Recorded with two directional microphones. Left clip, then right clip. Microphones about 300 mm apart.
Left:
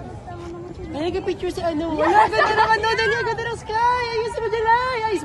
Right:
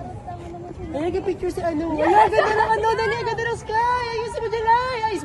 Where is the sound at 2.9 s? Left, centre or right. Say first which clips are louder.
Left 2 dB; right.